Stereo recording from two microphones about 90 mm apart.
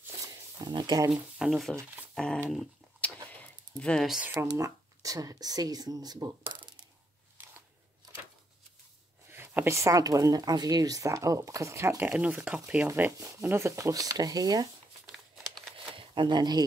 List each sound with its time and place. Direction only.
0.0 s a sound: 35° right (ahead or behind)
0.7 s speech: 55° right (ahead or behind)
1.1 s speech: 5° right (ahead or behind)
2.1 s a sound: 10° left (ahead or behind)
3.8 s speech: 10° left (ahead or behind)
4.3 s speech: 30° right (ahead or behind); by 6.3 s 45° right (ahead or behind)
7.4 s scissors: 20° right (ahead or behind)
9.3 s a woman's voice: 25° right (ahead or behind); by 10.4 s 40° right (ahead or behind)
10.4 s speech: 50° right (ahead or behind); by 12.1 s 30° right (ahead or behind)
12.1 s speech: 15° right (ahead or behind)
12.9 s speech: 25° right (ahead or behind); by 14.7 s 45° right (ahead or behind)
15.0 s crumpling: centre (ahead or behind)
15.9 s speech: 65° right (ahead or behind)